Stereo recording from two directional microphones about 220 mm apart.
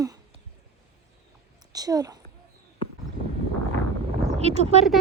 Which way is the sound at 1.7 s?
15° right (ahead or behind).